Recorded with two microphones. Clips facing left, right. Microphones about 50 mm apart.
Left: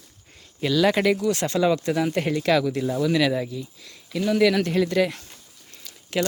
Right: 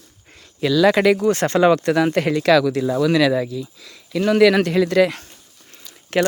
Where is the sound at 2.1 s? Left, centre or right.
Right.